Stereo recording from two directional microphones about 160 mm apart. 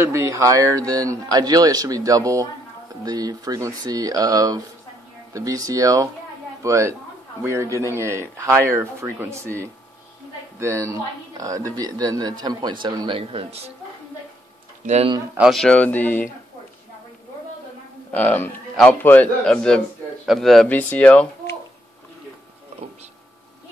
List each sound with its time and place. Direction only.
0.0 s speech: 20° right (ahead or behind); by 13.7 s 40° right (ahead or behind)
15.3 s a man's voice: centre (ahead or behind)
18.1 s a man's voice: 10° left (ahead or behind)